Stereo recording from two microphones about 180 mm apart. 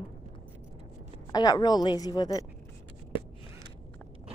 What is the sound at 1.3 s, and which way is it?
A woman's voice, 20° left (ahead or behind).